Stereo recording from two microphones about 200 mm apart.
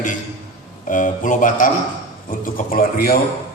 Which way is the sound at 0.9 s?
40° left (ahead or behind).